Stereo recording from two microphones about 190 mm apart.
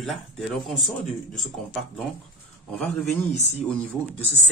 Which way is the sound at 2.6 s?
5° left (ahead or behind).